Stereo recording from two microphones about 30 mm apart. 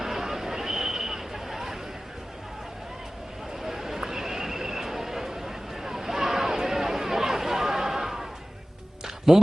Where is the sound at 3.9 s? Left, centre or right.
Centre.